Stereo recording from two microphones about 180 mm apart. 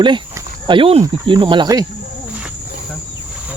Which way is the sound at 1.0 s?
25° right (ahead or behind).